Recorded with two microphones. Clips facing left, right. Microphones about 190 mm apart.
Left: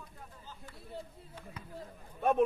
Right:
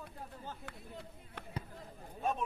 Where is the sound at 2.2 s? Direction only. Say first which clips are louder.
Left 9 dB; 65° left (ahead or behind).